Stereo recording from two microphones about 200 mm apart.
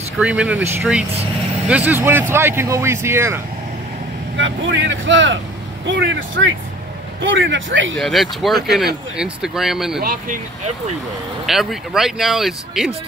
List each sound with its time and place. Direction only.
0.2 s speech: 5° right (ahead or behind)
4.4 s speech: 70° right (ahead or behind)
8.0 s speech: centre (ahead or behind)
11.4 s speech: centre (ahead or behind)